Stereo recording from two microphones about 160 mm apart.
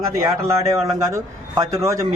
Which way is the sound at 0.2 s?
20° right (ahead or behind).